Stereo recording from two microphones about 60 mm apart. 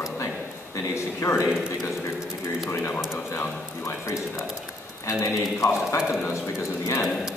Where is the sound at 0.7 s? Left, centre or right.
Left.